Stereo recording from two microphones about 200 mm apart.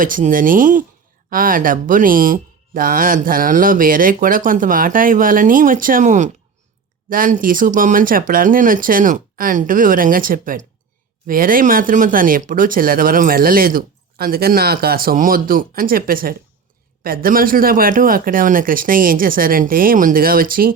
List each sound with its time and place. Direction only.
0.0 s speech: 40° right (ahead or behind)